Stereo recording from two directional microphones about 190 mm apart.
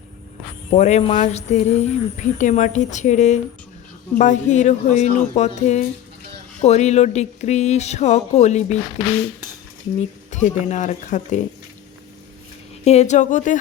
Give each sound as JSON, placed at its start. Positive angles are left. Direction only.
{"t": 0.7, "sound": "speech", "side_deg": 35}
{"t": 10.0, "sound": "speech", "side_deg": 40}
{"t": 12.8, "sound": "speech", "side_deg": 35}